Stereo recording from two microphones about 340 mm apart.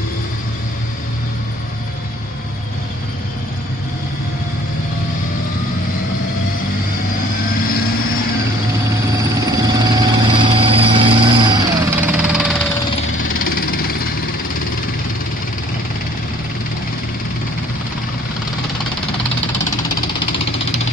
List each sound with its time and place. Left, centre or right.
9.5 s vehicle: centre
13.4 s engine: left